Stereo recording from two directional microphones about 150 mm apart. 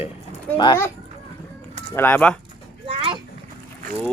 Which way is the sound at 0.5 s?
30° left (ahead or behind).